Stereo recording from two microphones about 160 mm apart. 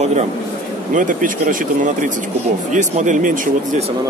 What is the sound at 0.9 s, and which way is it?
Speech, 55° right (ahead or behind).